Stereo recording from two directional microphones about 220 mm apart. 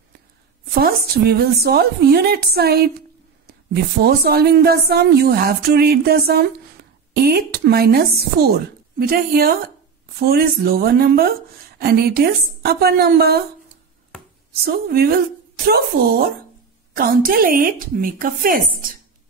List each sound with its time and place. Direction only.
0.7 s a woman's voice: 45° right (ahead or behind)
14.6 s a woman's voice: 45° right (ahead or behind)